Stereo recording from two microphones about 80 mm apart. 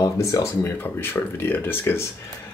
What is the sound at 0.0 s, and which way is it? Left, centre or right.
Speech, left.